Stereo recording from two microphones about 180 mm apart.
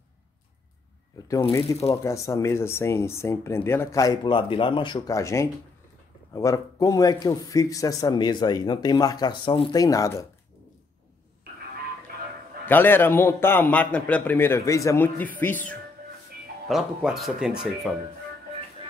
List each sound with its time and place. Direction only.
1.7 s a man's voice: 15° left (ahead or behind)
12.6 s a man's voice: 10° left (ahead or behind)
16.6 s speech: centre (ahead or behind)